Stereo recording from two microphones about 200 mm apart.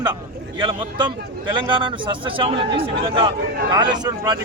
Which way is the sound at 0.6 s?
20° right (ahead or behind).